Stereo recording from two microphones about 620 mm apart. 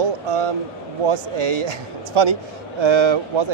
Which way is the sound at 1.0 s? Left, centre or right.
Right.